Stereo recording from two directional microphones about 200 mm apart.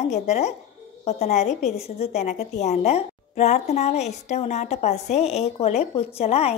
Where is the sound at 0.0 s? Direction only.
35° left (ahead or behind).